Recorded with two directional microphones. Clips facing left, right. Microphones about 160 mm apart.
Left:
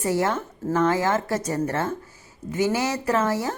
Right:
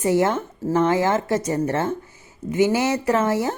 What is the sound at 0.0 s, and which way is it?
A woman's voice, 20° right (ahead or behind).